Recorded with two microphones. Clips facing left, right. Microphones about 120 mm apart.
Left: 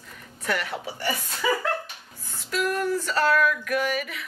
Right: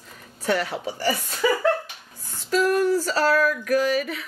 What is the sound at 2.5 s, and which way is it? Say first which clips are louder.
Speech: right 6 dB; 35° right (ahead or behind).